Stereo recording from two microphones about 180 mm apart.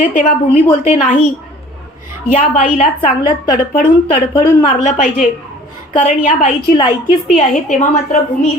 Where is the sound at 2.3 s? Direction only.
40° left (ahead or behind).